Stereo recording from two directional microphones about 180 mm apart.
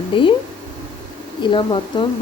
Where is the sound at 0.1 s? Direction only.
30° left (ahead or behind).